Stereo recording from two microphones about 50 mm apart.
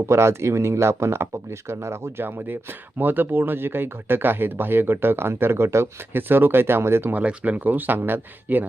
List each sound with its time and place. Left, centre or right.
0.1 s speech: right
2.2 s speech: right
6.1 s speech: right
7.1 s speech: right